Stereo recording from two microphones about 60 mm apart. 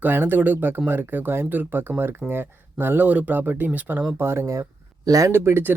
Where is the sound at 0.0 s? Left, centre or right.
Right.